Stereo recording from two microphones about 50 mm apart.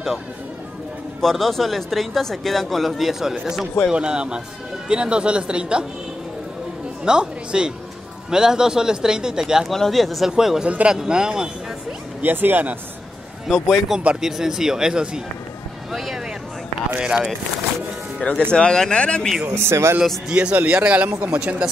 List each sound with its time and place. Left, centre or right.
1.2 s speech: centre
3.9 s a man's voice: centre
7.1 s a man's voice: centre
9.7 s speech: centre
10.2 s a man's voice: centre
10.6 s speech: right
10.9 s a man's voice: centre
12.2 s speech: right
13.5 s a man's voice: centre
15.9 s vehicle: centre
17.0 s a man's voice: centre
18.5 s speech: centre
19.5 s speech: right
20.2 s speech: right